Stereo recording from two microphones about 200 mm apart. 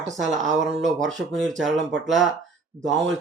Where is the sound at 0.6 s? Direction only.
Centre (ahead or behind).